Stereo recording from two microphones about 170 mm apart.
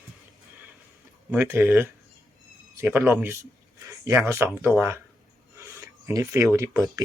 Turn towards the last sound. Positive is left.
turn(degrees=-20)  # may be behind; listen again after turning